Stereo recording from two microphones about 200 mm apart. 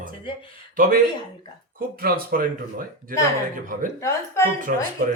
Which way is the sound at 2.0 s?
45° right (ahead or behind).